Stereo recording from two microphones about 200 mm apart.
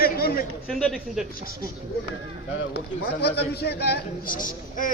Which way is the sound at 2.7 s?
55° left (ahead or behind).